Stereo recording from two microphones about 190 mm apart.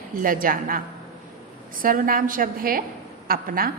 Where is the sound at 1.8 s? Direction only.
50° right (ahead or behind).